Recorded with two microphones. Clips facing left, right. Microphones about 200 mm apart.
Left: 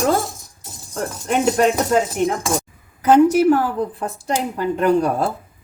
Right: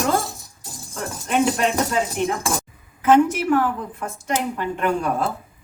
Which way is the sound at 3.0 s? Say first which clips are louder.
Left 4 dB; 40° left (ahead or behind).